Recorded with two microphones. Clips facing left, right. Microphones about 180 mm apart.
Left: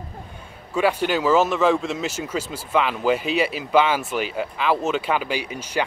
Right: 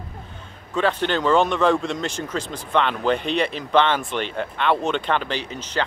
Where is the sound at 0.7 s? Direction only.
10° left (ahead or behind).